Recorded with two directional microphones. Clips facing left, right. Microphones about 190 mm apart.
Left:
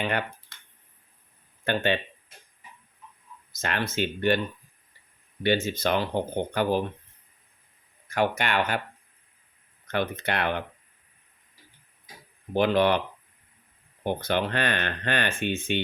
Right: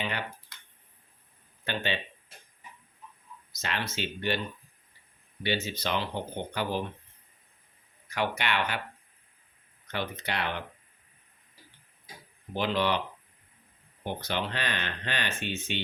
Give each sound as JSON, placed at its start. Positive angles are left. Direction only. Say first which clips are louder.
{"t": 0.0, "sound": "speech", "louder": "left 6 dB", "side_deg": 55}
{"t": 1.6, "sound": "speech", "louder": "left 7 dB", "side_deg": 50}
{"t": 3.6, "sound": "speech", "louder": "left 6 dB", "side_deg": 50}
{"t": 5.4, "sound": "speech", "louder": "left 7 dB", "side_deg": 50}
{"t": 8.1, "sound": "speech", "louder": "left 5 dB", "side_deg": 45}
{"t": 9.9, "sound": "speech", "louder": "left 6 dB", "side_deg": 55}
{"t": 12.5, "sound": "speech", "louder": "left 6 dB", "side_deg": 50}
{"t": 14.0, "sound": "speech", "louder": "left 6 dB", "side_deg": 50}